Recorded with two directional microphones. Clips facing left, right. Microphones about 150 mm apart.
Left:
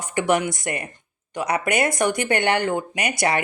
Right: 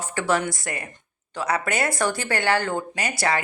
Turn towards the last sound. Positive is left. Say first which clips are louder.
# left 2 dB
turn(degrees=20)  # may be behind; listen again after turning